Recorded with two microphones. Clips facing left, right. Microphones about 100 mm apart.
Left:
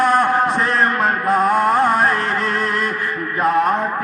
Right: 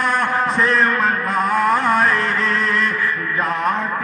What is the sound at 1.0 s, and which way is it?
Music, 35° left (ahead or behind).